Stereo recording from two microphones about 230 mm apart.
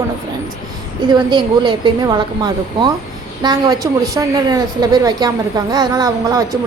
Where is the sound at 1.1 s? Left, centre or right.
Centre.